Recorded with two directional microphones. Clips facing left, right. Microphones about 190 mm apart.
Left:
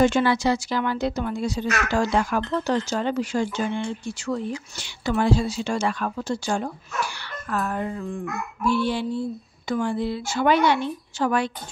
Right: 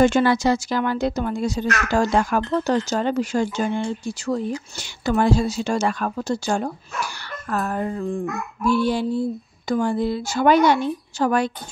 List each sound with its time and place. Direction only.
0.0 s speech: 45° right (ahead or behind)